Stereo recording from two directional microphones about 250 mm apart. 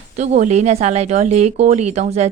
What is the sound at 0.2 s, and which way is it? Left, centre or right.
A woman's voice, right.